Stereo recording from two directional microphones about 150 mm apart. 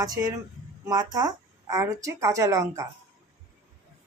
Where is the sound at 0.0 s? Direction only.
25° right (ahead or behind).